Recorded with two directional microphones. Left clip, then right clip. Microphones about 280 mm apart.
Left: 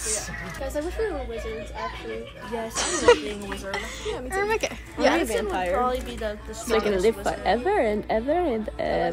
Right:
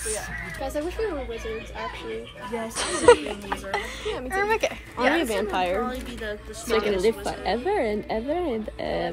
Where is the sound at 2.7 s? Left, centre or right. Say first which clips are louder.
Right 2 dB; centre.